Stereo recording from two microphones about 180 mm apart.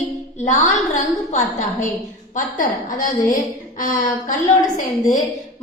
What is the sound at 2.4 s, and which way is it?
A woman's voice, 45° left (ahead or behind).